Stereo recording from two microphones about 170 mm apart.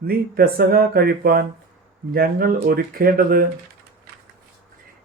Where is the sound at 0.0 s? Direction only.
60° right (ahead or behind).